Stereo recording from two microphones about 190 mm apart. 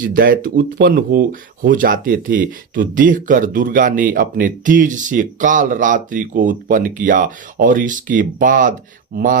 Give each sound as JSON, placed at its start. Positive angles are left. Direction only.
{"t": 0.0, "sound": "speech", "side_deg": -45}